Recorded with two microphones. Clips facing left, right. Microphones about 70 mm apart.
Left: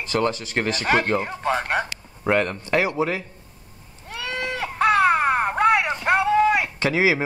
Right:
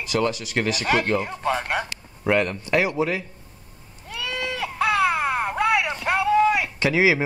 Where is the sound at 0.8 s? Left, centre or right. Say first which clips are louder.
Left 2 dB; left.